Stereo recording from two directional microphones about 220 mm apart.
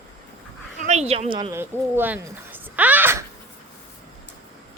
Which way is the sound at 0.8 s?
30° right (ahead or behind).